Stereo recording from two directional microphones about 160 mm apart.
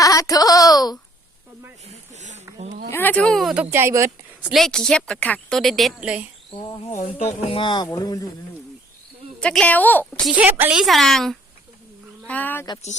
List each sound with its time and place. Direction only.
0.0 s a sound: 20° left (ahead or behind)
1.9 s a sound: 45° right (ahead or behind)
2.9 s speech: 10° left (ahead or behind); by 4.5 s 15° right (ahead or behind)
4.5 s a woman's voice: 5° left (ahead or behind)
7.2 s speech: 40° left (ahead or behind); by 8.3 s 25° left (ahead or behind)
9.4 s a woman's voice: 5° left (ahead or behind)
10.3 s a woman's voice: 10° right (ahead or behind); by 12.6 s 10° left (ahead or behind)